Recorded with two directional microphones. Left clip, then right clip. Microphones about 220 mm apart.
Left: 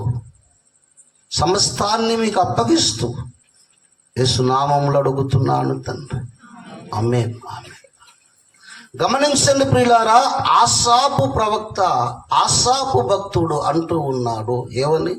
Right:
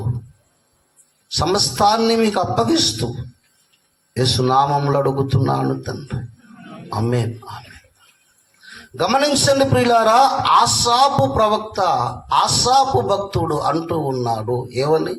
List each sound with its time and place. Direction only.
1.3 s a man's voice: 25° right (ahead or behind)
4.1 s a man's voice: 25° right (ahead or behind)
8.6 s a man's voice: 25° right (ahead or behind)